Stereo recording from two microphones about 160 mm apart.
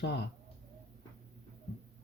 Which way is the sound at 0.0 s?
90° left.